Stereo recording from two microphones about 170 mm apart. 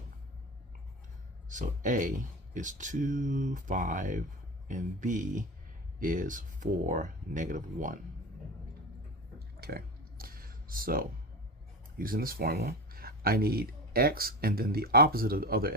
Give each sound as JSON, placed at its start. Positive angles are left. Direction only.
{"t": 1.5, "sound": "speech", "side_deg": -50}
{"t": 9.6, "sound": "a sound", "side_deg": -65}
{"t": 11.9, "sound": "speech", "side_deg": -60}